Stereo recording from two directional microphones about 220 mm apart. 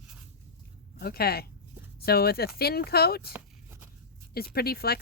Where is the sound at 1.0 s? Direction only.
45° left (ahead or behind).